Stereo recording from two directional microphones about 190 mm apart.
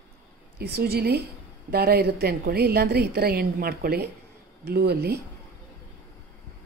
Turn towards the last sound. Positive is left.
turn(degrees=-55)  # may be behind; listen again after turning